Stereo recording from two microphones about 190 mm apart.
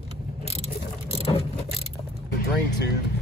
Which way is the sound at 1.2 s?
30° left (ahead or behind).